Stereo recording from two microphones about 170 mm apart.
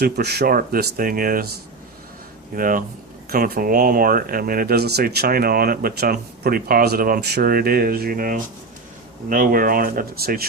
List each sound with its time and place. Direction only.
0.0 s speech: 70° right (ahead or behind)
2.6 s speech: 55° right (ahead or behind)